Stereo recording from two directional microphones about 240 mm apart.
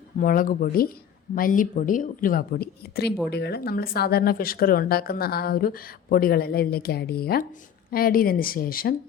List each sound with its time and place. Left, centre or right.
0.2 s speech: left